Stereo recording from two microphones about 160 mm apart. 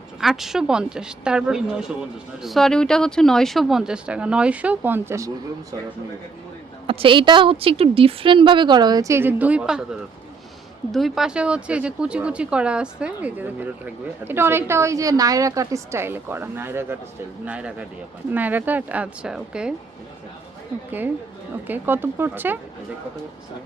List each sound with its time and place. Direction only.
0.2 s speech: centre (ahead or behind); by 5.3 s 15° right (ahead or behind)
6.8 s a woman's voice: 35° right (ahead or behind); by 9.8 s 5° right (ahead or behind)
10.9 s speech: centre (ahead or behind)
21.7 s speech: 15° right (ahead or behind)